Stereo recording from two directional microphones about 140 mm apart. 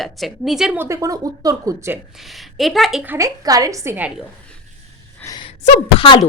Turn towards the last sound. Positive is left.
turn(degrees=35)  # may be behind; listen again after turning